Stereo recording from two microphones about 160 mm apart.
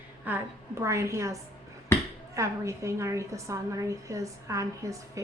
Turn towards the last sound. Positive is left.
turn(degrees=-20)  # may be behind; listen again after turning